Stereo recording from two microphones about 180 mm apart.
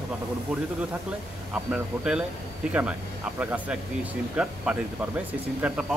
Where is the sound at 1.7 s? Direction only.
5° right (ahead or behind).